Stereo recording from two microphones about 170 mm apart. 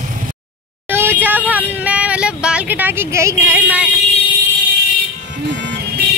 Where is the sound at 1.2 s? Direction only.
10° right (ahead or behind).